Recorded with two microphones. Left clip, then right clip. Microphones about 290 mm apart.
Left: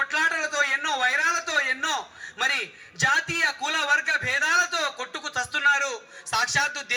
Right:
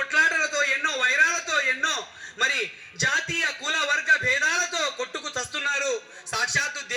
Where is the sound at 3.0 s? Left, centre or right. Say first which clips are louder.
Left 2 dB; centre.